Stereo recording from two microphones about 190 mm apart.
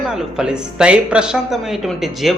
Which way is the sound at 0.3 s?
5° right (ahead or behind).